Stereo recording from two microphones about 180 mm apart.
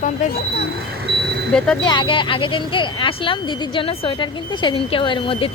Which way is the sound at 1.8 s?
25° left (ahead or behind).